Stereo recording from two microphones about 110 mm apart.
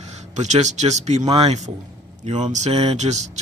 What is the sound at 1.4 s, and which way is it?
Speech, 90° right.